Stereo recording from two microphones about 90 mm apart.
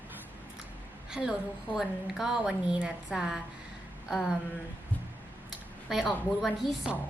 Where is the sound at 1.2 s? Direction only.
15° right (ahead or behind).